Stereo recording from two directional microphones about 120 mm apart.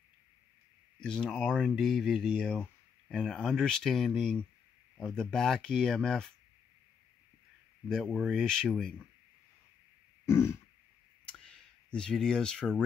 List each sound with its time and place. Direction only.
1.0 s speech: 5° left (ahead or behind)
7.9 s speech: 5° left (ahead or behind)
10.2 s throat clearing: 20° left (ahead or behind)
11.2 s clicking: 5° left (ahead or behind)